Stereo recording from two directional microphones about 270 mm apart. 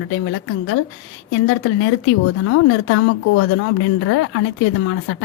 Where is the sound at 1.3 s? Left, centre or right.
Left.